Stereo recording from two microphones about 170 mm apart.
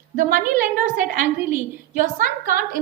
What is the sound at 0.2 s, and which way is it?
A woman's voice, 50° right (ahead or behind).